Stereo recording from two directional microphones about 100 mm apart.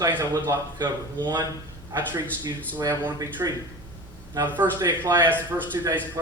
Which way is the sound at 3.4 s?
30° right (ahead or behind).